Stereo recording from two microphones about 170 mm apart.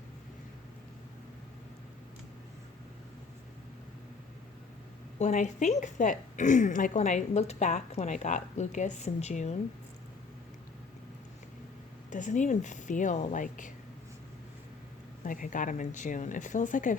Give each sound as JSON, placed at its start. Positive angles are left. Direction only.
{"t": 5.2, "sound": "a woman's voice", "side_deg": 45}
{"t": 12.1, "sound": "a woman's voice", "side_deg": 50}
{"t": 15.2, "sound": "a woman's voice", "side_deg": 50}